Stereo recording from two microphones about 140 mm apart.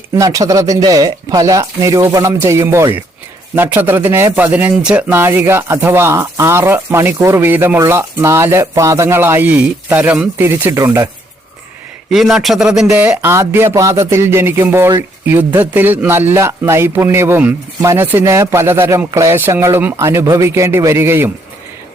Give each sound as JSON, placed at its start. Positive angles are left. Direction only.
{"t": 0.2, "sound": "speech", "side_deg": -25}
{"t": 12.1, "sound": "speech", "side_deg": 0}
{"t": 12.9, "sound": "speech", "side_deg": -15}